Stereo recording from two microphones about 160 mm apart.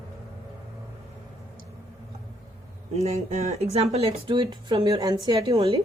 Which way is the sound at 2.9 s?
40° right (ahead or behind).